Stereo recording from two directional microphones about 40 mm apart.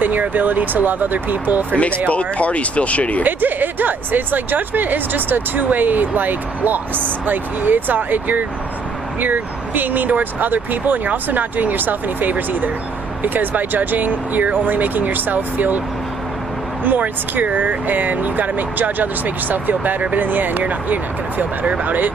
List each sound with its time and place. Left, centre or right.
0.0 s speech: right
1.7 s speech: left
3.2 s speech: right
16.8 s speech: right
21.7 s speech: right